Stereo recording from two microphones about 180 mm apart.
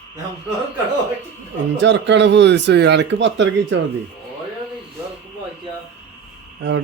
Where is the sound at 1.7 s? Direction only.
90° right.